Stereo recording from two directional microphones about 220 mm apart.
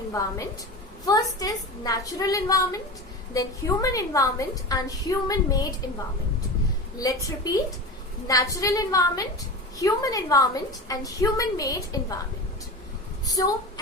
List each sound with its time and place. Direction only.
0.1 s a woman's voice: 15° left (ahead or behind)
7.0 s a woman's voice: 15° left (ahead or behind)
13.2 s a woman's voice: 15° left (ahead or behind)